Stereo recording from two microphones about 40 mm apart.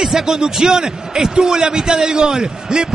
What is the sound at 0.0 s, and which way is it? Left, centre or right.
A man's voice, centre.